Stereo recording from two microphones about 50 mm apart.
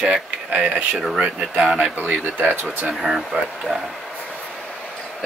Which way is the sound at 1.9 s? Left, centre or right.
Right.